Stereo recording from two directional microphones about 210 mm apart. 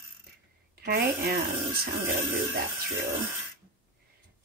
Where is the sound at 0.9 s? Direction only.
45° right (ahead or behind).